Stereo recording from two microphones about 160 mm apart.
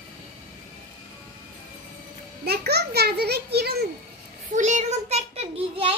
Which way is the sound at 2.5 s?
90° right.